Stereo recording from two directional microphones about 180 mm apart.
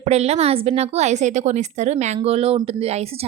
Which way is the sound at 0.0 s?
35° right (ahead or behind).